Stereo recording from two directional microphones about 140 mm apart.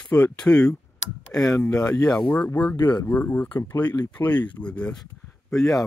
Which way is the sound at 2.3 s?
10° left (ahead or behind).